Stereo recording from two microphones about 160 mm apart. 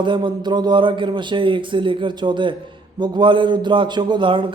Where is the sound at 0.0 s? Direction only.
30° right (ahead or behind).